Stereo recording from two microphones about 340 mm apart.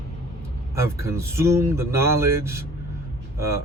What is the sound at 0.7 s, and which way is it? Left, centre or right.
Speech, centre.